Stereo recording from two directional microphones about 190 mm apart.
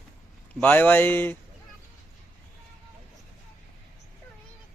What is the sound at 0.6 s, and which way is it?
Speech, 10° left (ahead or behind).